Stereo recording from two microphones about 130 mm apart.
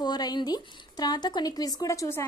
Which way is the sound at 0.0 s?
30° left (ahead or behind).